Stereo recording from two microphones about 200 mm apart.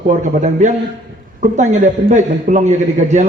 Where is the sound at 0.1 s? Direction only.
35° right (ahead or behind).